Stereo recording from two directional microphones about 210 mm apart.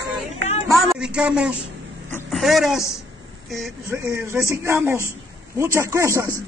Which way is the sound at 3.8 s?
10° right (ahead or behind).